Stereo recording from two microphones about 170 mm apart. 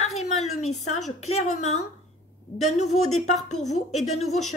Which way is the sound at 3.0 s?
Centre (ahead or behind).